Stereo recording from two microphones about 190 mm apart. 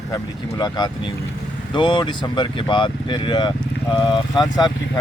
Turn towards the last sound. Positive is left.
turn(degrees=20)  # may be behind; listen again after turning